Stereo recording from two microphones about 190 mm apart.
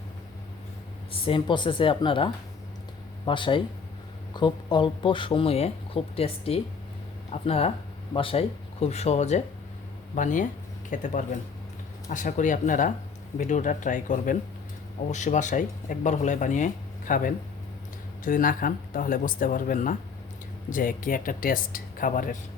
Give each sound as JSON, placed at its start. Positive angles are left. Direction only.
{"t": 1.1, "sound": "speech", "side_deg": 30}